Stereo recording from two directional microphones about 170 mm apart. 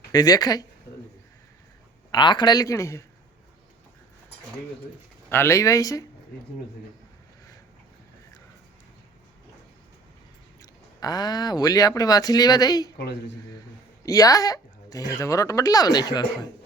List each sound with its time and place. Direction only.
0.1 s speech: 20° left (ahead or behind)
2.1 s speech: 25° left (ahead or behind)
5.3 s speech: 15° left (ahead or behind)
10.6 s speech: 20° left (ahead or behind)
14.0 s speech: 20° left (ahead or behind)